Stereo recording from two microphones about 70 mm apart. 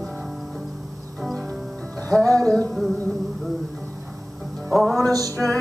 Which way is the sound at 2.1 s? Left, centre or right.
Centre.